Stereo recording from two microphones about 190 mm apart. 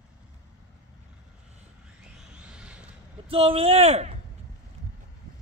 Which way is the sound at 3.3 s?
30° right (ahead or behind).